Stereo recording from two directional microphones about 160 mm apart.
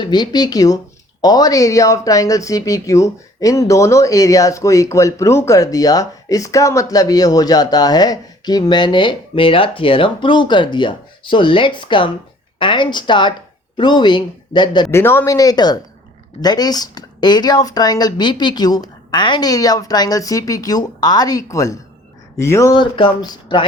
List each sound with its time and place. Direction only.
0.0 s speech: 25° left (ahead or behind)
14.8 s speech: 15° left (ahead or behind)